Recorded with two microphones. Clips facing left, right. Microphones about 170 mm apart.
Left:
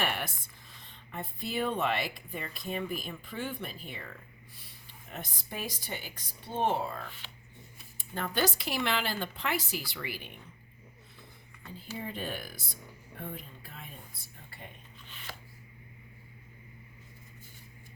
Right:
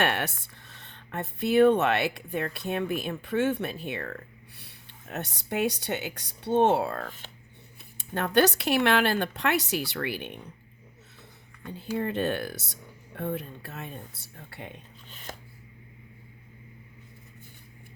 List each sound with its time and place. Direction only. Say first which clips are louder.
0.0 s speech: right 7 dB; 70° right (ahead or behind)
7.0 s speech: right 6 dB; 45° right (ahead or behind)
7.8 s speech: right 6 dB; 70° right (ahead or behind)
11.8 s speech: right 10 dB; 75° right (ahead or behind)
15.1 s shuffling cards: right 5 dB; 45° right (ahead or behind)